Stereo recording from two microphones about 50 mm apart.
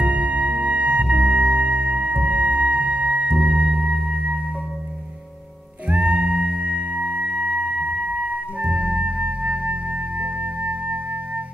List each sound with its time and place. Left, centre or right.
0.0 s music: right
5.9 s music: right